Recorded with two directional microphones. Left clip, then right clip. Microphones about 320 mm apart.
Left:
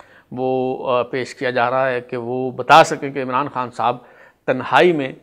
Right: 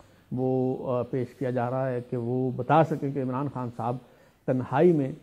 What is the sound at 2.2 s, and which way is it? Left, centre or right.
Speech, left.